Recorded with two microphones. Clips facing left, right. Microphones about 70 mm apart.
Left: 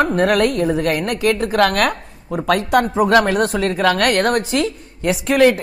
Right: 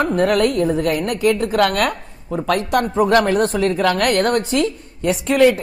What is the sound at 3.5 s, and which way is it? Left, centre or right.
Speech, left.